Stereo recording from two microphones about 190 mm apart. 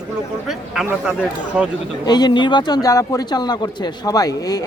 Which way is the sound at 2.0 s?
20° left (ahead or behind).